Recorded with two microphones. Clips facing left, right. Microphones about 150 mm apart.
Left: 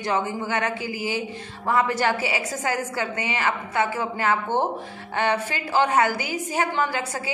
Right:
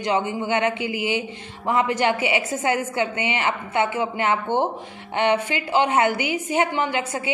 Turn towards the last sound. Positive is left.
turn(degrees=-20)  # may be behind; listen again after turning